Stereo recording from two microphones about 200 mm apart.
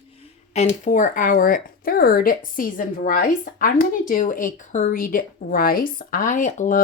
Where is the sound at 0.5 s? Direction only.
35° left (ahead or behind).